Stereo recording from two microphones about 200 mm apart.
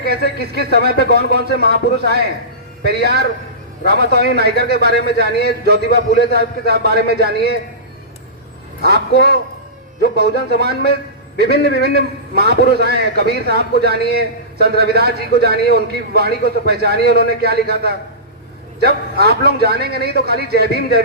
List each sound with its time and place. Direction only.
0.0 s a man's voice: 50° right (ahead or behind)
8.8 s a man's voice: 50° right (ahead or behind)